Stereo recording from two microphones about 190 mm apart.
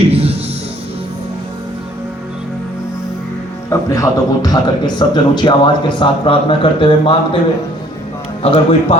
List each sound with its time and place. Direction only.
0.1 s music: 30° right (ahead or behind)
3.7 s a man's voice: 15° left (ahead or behind)
8.4 s speech: 30° left (ahead or behind)